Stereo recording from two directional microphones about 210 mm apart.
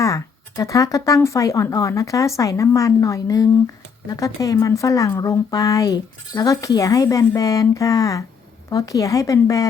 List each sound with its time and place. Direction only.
0.0 s speech: 15° left (ahead or behind)